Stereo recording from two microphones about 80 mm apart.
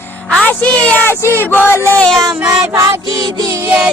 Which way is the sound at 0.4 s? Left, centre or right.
Centre.